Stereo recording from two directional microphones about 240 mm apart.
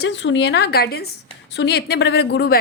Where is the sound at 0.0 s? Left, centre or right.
Left.